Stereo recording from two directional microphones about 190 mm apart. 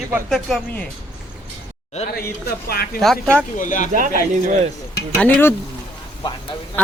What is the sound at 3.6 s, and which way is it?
Speech, 40° left (ahead or behind).